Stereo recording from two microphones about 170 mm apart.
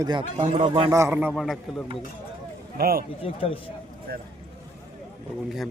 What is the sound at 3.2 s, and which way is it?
Speech, 35° left (ahead or behind).